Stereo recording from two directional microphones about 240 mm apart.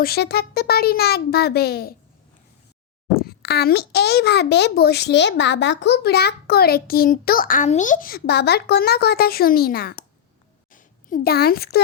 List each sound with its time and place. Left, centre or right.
0.0 s a child's voice: left
3.2 s a child's voice: left
10.7 s a sound: left